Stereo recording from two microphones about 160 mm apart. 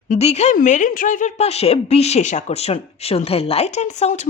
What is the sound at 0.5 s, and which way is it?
A woman's voice, 55° left (ahead or behind).